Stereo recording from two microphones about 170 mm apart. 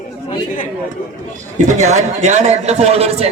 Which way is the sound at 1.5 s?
45° right (ahead or behind).